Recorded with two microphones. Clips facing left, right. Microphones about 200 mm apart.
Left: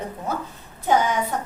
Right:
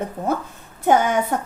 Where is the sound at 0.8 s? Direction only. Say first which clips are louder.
Right 3 dB; 55° right (ahead or behind).